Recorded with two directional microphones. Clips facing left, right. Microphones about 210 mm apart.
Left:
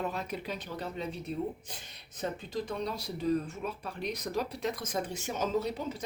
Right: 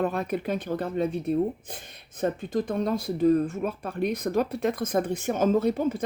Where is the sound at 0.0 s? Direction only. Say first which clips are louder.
Right 9 dB; 55° right (ahead or behind).